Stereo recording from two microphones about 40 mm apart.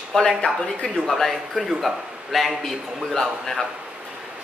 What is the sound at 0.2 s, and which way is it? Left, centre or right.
Speech, left.